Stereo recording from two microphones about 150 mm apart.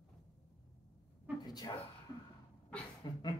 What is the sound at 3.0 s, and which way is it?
Speech, 30° left (ahead or behind).